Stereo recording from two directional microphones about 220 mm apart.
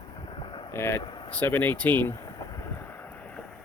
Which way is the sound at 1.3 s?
10° left (ahead or behind).